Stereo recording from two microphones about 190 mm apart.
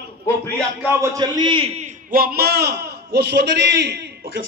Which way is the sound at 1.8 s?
50° right (ahead or behind).